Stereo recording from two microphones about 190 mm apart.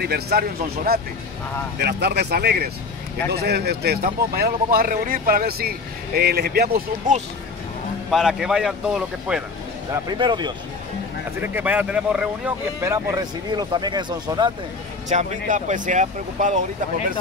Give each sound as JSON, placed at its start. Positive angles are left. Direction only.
{"t": 0.0, "sound": "speech", "side_deg": -55}
{"t": 8.1, "sound": "speech", "side_deg": 0}
{"t": 9.9, "sound": "speech", "side_deg": -25}
{"t": 11.4, "sound": "speech", "side_deg": -10}
{"t": 15.0, "sound": "speech", "side_deg": -40}